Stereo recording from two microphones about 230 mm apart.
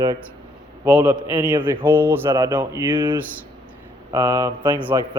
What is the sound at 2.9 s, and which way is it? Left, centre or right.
Speech, right.